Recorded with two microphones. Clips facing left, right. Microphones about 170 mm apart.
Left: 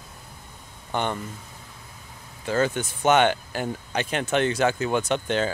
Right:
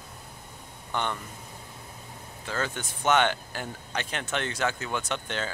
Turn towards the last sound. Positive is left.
turn(degrees=20)  # may be behind; listen again after turning